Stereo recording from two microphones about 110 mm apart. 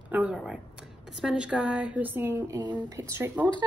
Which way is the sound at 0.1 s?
15° right (ahead or behind).